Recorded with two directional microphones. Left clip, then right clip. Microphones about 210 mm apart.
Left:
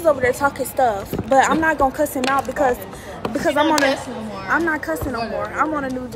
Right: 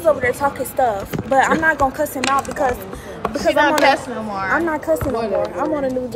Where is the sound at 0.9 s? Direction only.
20° left (ahead or behind).